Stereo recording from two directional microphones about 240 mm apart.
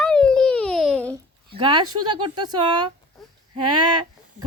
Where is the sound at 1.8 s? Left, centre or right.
Right.